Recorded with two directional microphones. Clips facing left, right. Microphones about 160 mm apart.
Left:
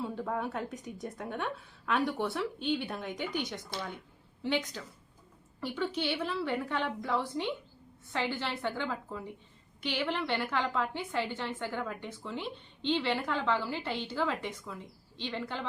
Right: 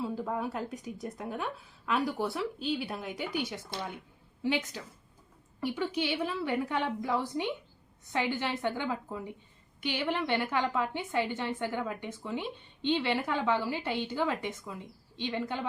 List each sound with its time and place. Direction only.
0.0 s a woman's voice: 5° right (ahead or behind)
3.7 s a woman's voice: 15° right (ahead or behind)